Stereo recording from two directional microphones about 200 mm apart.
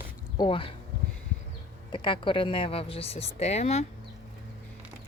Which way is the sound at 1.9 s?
25° left (ahead or behind).